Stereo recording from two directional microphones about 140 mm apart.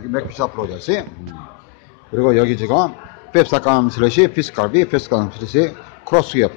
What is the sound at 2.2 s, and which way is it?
A man's voice, 80° left.